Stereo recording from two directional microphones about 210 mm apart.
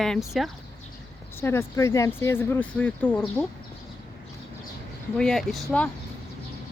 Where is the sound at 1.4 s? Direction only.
10° left (ahead or behind).